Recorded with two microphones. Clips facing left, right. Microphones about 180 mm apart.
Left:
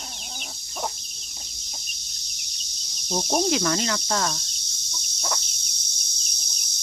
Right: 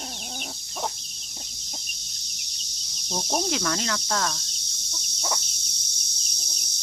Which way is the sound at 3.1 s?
10° left (ahead or behind).